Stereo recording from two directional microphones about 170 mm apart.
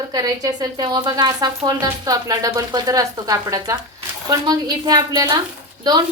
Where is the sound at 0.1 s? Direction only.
20° right (ahead or behind).